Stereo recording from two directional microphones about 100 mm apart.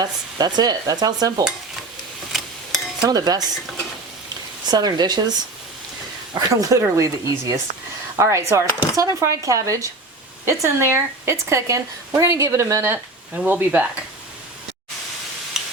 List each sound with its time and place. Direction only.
0.0 s speech: 40° right (ahead or behind)
3.0 s speech: 40° right (ahead or behind)
4.7 s speech: 45° right (ahead or behind)
6.3 s speech: 35° right (ahead or behind); by 14.0 s 15° right (ahead or behind)
15.6 s tick-tock: 5° right (ahead or behind)